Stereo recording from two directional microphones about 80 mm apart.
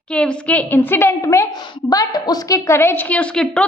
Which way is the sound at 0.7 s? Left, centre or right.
Left.